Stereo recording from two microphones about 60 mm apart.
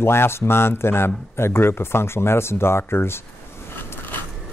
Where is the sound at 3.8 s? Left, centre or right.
Left.